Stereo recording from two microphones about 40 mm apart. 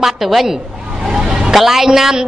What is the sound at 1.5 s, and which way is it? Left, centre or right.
Speech, centre.